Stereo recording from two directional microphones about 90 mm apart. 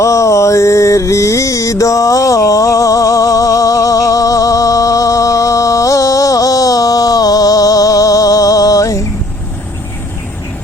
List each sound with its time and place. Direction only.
0.0 s music: 35° left (ahead or behind)